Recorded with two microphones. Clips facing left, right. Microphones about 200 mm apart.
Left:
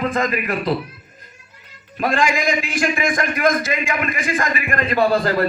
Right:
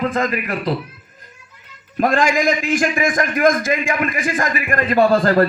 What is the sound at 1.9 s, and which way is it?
A man's voice, 45° right (ahead or behind).